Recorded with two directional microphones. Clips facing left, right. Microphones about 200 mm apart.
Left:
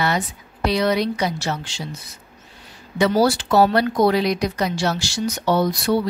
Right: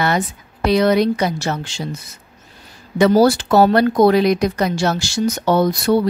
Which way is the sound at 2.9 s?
45° right (ahead or behind).